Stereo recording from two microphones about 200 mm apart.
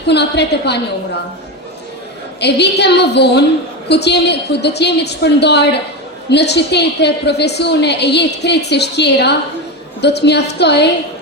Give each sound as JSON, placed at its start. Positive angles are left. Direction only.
{"t": 0.1, "sound": "a woman's voice", "side_deg": 55}
{"t": 2.4, "sound": "a woman's voice", "side_deg": 55}